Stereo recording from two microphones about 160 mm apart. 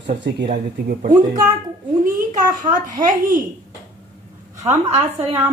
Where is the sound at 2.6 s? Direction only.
55° right (ahead or behind).